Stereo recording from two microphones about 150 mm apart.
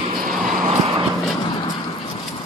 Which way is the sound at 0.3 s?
Centre (ahead or behind).